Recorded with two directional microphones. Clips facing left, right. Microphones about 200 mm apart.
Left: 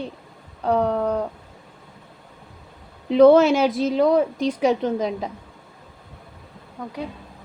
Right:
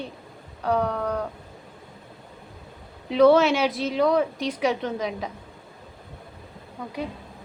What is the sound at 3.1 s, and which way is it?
Speech, 50° left (ahead or behind).